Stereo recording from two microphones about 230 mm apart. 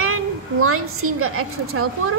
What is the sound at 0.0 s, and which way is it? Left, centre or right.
A woman's voice, right.